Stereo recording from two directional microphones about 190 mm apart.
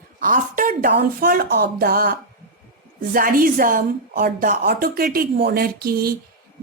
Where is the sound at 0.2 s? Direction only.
45° right (ahead or behind).